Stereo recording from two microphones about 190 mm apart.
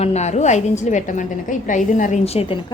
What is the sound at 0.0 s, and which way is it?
A woman's voice, 35° left (ahead or behind).